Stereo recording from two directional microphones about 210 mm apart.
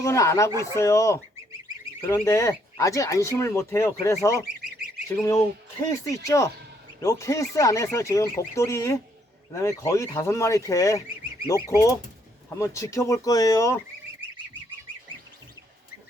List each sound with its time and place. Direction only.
0.0 s speech: 15° left (ahead or behind)